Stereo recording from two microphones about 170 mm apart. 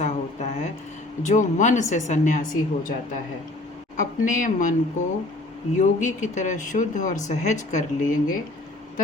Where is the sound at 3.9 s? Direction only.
50° left (ahead or behind).